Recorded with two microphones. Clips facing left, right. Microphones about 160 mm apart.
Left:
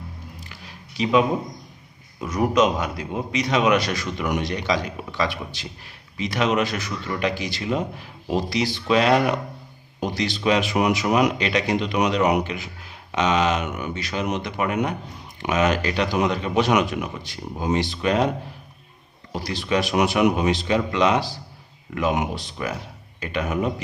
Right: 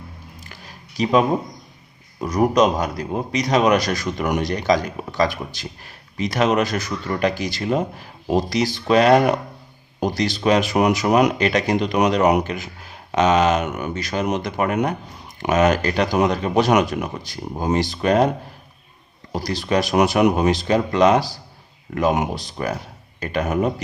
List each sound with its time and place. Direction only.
0.4 s a sound: 45° right (ahead or behind)
2.2 s a man's voice: 35° right (ahead or behind)
19.3 s a man's voice: 40° right (ahead or behind)